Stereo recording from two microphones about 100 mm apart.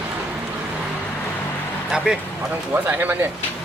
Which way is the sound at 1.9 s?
5° right (ahead or behind).